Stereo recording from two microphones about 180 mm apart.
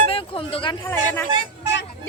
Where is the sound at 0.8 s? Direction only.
10° left (ahead or behind).